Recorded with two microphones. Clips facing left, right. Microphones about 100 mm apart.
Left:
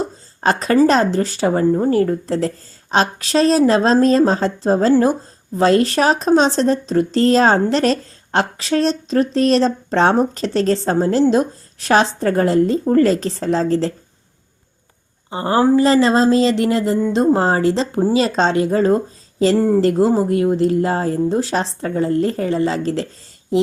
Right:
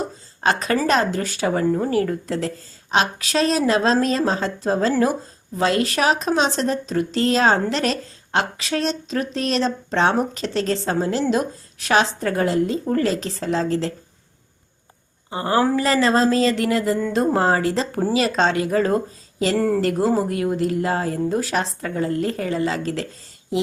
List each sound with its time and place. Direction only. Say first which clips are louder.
0.4 s speech: left 6 dB; 35° left (ahead or behind)
15.3 s speech: left 4 dB; 25° left (ahead or behind)